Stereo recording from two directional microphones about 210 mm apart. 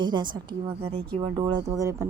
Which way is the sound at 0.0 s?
20° right (ahead or behind).